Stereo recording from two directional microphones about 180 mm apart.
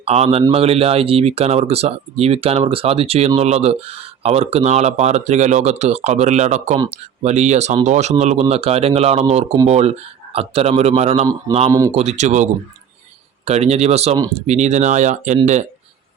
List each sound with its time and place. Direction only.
0.0 s speech: 35° right (ahead or behind)
11.5 s a man's voice: 20° right (ahead or behind)
11.9 s speech: 35° right (ahead or behind)